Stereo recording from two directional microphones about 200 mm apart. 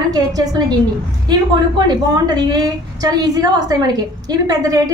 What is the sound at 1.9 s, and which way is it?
A woman's voice, 20° right (ahead or behind).